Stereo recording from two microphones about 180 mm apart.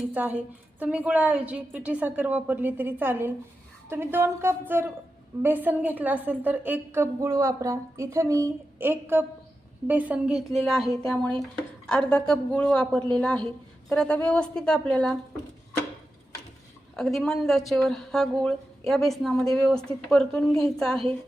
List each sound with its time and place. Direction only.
0.1 s a woman's voice: 10° right (ahead or behind)
16.9 s a woman's voice: centre (ahead or behind)